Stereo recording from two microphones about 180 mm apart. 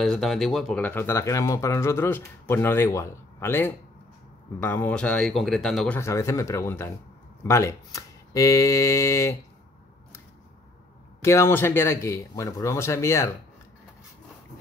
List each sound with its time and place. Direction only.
0.0 s speech: centre (ahead or behind)
5.9 s speech: 15° left (ahead or behind)
11.1 s speech: 15° left (ahead or behind)